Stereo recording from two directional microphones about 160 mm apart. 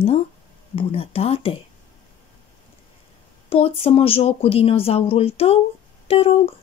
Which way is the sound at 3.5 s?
35° left (ahead or behind).